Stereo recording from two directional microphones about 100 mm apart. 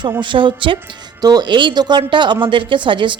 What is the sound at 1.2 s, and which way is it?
Speech, 40° right (ahead or behind).